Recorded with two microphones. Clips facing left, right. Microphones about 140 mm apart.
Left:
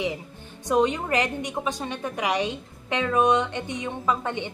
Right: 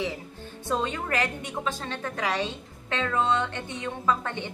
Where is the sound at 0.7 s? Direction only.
15° left (ahead or behind).